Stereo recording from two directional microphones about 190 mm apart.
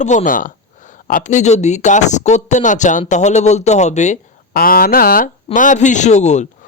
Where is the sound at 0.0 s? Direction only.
40° left (ahead or behind).